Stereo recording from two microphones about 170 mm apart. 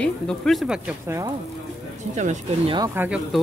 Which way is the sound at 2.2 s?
45° right (ahead or behind).